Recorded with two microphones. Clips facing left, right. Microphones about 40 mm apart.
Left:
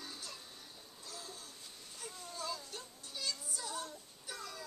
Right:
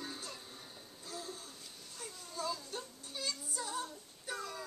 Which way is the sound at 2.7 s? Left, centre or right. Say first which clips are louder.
Right 3 dB; right.